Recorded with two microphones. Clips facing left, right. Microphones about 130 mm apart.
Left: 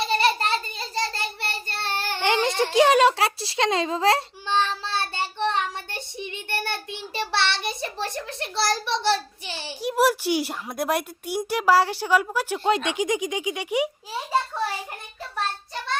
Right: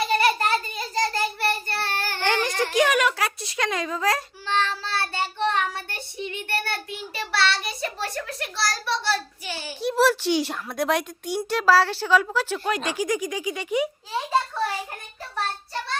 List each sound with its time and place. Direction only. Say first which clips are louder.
0.1 s child singing: even; 30° left (ahead or behind)
9.8 s speech: right 1 dB; 15° left (ahead or behind)
12.5 s child singing: left 3 dB; 25° left (ahead or behind)